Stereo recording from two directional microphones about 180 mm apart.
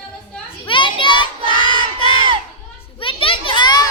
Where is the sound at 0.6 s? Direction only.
30° left (ahead or behind).